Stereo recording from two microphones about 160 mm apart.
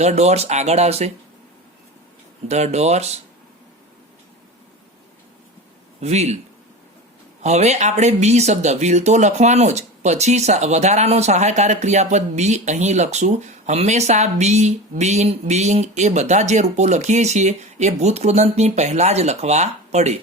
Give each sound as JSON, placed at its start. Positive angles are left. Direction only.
{"t": 0.0, "sound": "speech", "side_deg": -45}
{"t": 2.5, "sound": "speech", "side_deg": -45}
{"t": 6.0, "sound": "speech", "side_deg": -45}
{"t": 7.4, "sound": "speech", "side_deg": -45}